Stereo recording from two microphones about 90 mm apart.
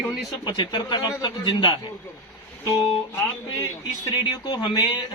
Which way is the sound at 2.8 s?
90° left.